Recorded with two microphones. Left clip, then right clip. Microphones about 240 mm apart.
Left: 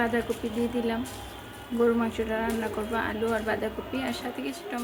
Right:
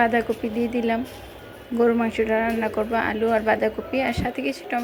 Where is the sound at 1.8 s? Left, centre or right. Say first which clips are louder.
Right 5 dB; centre.